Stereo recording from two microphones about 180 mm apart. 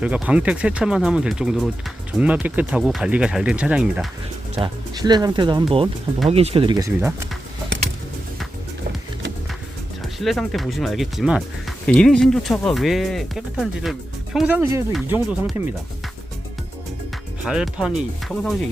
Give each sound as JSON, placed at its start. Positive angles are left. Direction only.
{"t": 0.0, "sound": "speech", "side_deg": -5}
{"t": 4.5, "sound": "speech", "side_deg": -25}
{"t": 6.2, "sound": "speech", "side_deg": -35}
{"t": 10.2, "sound": "speech", "side_deg": 0}
{"t": 17.4, "sound": "speech", "side_deg": -5}